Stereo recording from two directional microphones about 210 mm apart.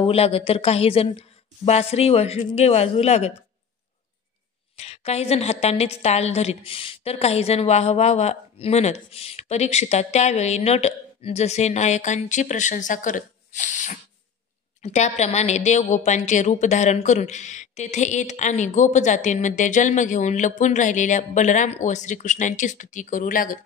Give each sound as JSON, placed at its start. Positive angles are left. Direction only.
{"t": 0.0, "sound": "a woman's voice", "side_deg": 30}
{"t": 4.7, "sound": "a woman's voice", "side_deg": 30}